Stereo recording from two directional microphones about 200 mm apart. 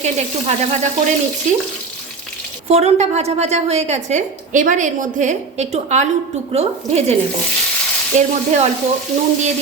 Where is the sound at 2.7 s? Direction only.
35° right (ahead or behind).